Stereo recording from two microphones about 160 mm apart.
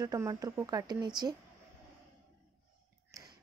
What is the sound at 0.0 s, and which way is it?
Speech, 20° right (ahead or behind).